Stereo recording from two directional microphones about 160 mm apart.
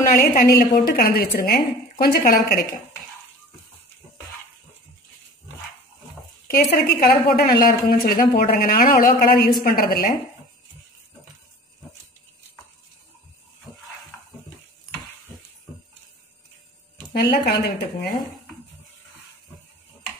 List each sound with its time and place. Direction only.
0.5 s a woman's voice: 70° left (ahead or behind)
6.4 s a woman's voice: 70° left (ahead or behind)
17.1 s speech: 90° left